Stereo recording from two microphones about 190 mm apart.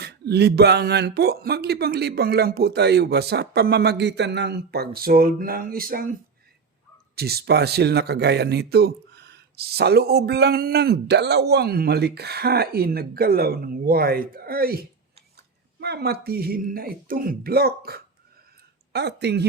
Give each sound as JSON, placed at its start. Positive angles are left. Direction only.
{"t": 0.0, "sound": "speech", "side_deg": -60}
{"t": 7.2, "sound": "speech", "side_deg": -55}